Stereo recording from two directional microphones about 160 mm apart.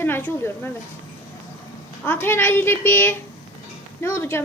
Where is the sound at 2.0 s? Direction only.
15° left (ahead or behind).